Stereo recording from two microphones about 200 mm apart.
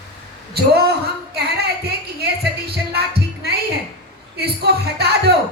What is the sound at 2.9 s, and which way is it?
Music, 55° right (ahead or behind).